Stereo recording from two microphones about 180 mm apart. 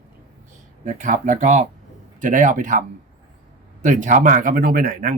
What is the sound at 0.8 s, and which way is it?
Speech, 45° right (ahead or behind).